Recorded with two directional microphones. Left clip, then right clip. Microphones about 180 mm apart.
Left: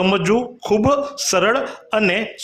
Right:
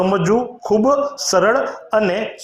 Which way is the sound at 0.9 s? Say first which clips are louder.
Right 2 dB; 40° left (ahead or behind).